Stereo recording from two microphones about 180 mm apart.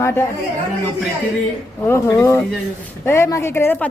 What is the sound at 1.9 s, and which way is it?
A woman's voice, 15° left (ahead or behind).